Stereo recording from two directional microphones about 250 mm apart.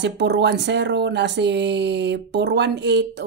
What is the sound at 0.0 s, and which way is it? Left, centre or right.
Speech, right.